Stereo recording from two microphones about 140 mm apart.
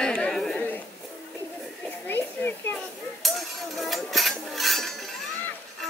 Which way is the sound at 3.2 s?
Centre (ahead or behind).